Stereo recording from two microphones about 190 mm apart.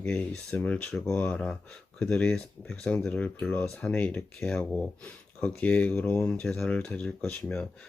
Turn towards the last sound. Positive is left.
turn(degrees=5)  # may be behind; listen again after turning